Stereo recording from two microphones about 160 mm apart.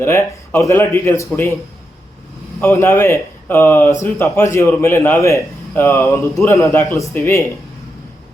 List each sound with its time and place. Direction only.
0.0 s a man's voice: 15° left (ahead or behind)
2.6 s a man's voice: 15° left (ahead or behind)